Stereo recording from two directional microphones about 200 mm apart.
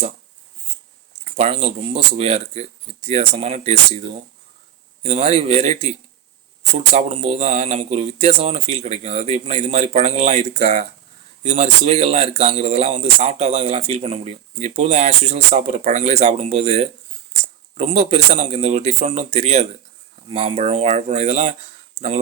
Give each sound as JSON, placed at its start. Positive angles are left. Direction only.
{"t": 1.2, "sound": "speech", "side_deg": -30}